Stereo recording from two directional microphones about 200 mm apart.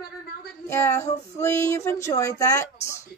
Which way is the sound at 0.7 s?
10° left (ahead or behind).